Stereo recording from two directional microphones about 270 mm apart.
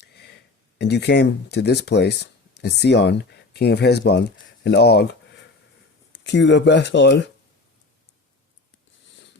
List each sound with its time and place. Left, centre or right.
0.0 s a sound: left
0.8 s speech: left
6.1 s speech: left